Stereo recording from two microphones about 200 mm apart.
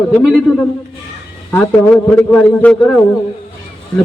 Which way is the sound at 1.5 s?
10° left (ahead or behind).